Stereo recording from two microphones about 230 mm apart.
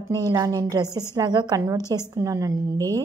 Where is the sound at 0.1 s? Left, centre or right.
Centre.